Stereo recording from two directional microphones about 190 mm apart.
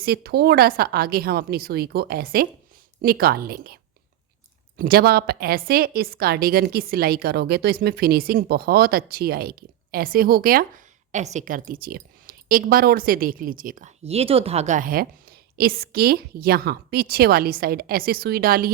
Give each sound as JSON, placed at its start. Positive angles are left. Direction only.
{"t": 0.0, "sound": "a woman's voice", "side_deg": -55}
{"t": 4.8, "sound": "a woman's voice", "side_deg": -55}
{"t": 14.1, "sound": "a woman's voice", "side_deg": -30}